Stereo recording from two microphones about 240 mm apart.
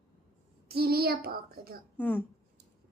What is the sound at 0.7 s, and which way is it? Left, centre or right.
A child's voice, right.